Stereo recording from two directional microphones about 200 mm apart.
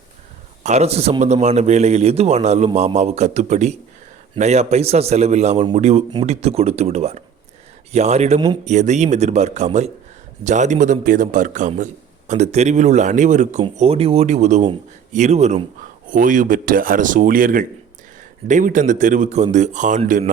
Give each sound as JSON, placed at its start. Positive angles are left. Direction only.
{"t": 0.6, "sound": "a man's voice", "side_deg": -35}